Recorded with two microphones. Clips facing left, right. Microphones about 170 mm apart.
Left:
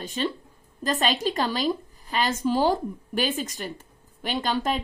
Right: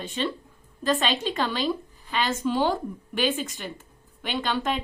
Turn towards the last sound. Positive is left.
turn(degrees=40)  # may be behind; listen again after turning